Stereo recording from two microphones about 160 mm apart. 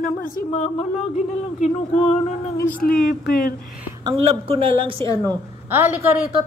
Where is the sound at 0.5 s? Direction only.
45° left (ahead or behind).